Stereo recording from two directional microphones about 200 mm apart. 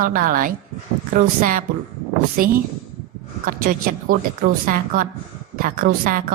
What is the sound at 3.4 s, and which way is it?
A woman's voice, 45° right (ahead or behind).